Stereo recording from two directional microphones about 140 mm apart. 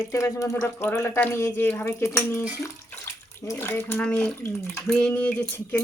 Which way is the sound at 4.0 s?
10° left (ahead or behind).